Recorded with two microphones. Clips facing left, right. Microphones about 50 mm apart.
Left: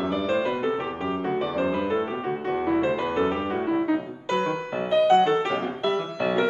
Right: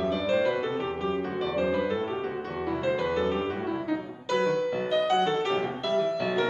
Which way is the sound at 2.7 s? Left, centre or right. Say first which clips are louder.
Left 2 dB; left.